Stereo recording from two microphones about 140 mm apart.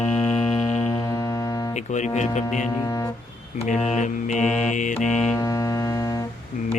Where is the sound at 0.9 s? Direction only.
25° left (ahead or behind).